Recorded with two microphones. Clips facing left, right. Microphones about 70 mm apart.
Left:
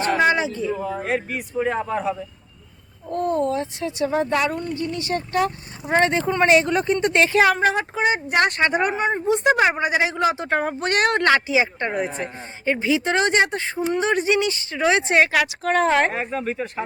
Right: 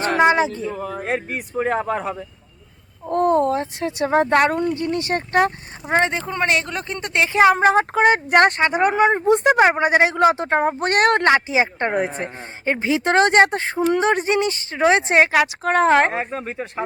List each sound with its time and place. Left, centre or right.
0.3 s speech: right
1.0 s speech: right
1.7 s speech: right
6.0 s speech: centre
7.3 s speech: right
7.9 s speech: right
8.4 s speech: right
9.2 s speech: right
10.5 s speech: right
10.8 s speech: right
11.2 s speech: right
11.5 s speech: right